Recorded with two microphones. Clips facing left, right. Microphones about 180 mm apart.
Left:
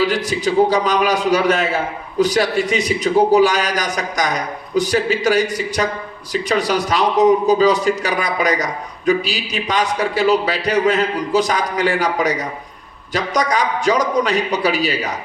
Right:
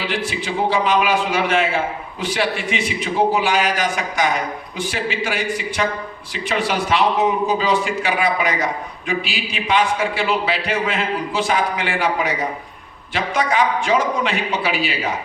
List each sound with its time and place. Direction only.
0.0 s a man's voice: 40° left (ahead or behind)